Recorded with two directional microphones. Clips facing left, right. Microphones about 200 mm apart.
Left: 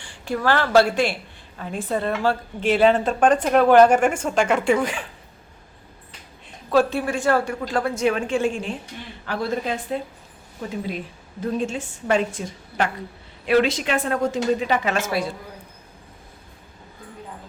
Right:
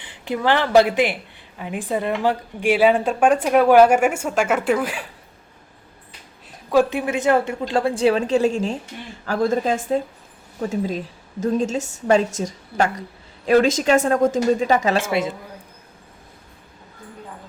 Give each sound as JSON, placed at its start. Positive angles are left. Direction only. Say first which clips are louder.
{"t": 0.0, "sound": "speech", "louder": "right 1 dB", "side_deg": -20}
{"t": 6.5, "sound": "a woman's voice", "louder": "right 2 dB", "side_deg": -15}